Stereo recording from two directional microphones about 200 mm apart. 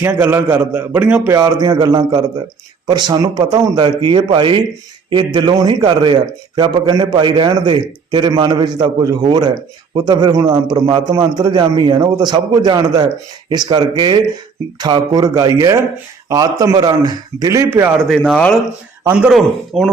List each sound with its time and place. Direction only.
0.0 s a man's voice: 10° right (ahead or behind)
18.1 s speech: 5° left (ahead or behind)
19.0 s speech: 5° right (ahead or behind)